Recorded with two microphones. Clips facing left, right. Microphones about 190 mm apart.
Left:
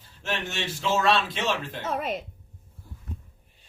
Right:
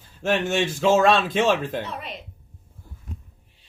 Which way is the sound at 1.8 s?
45° left (ahead or behind).